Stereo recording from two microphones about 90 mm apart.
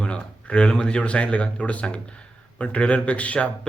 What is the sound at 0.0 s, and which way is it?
Speech, 10° left (ahead or behind).